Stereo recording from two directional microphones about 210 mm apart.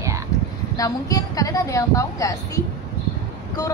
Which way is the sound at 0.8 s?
15° left (ahead or behind).